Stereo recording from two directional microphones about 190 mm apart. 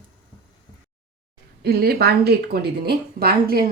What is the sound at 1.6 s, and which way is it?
Speech, 55° right (ahead or behind).